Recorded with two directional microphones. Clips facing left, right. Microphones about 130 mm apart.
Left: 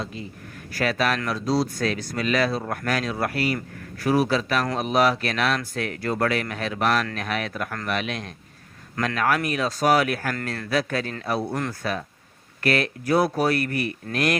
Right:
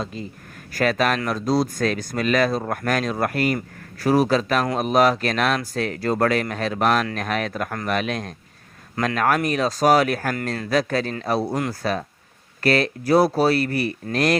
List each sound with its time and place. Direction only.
0.7 s speech: 45° right (ahead or behind)